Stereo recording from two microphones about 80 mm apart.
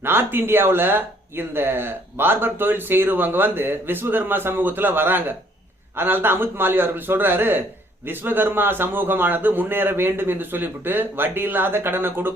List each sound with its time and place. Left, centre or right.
0.0 s speech: right